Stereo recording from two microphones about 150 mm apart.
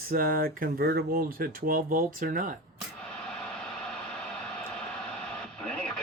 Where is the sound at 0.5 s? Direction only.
90° right.